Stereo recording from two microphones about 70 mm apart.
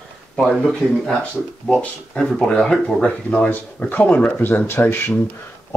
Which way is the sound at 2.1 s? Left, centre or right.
Centre.